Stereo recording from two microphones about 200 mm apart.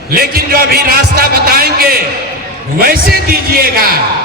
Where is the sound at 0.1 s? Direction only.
45° right (ahead or behind).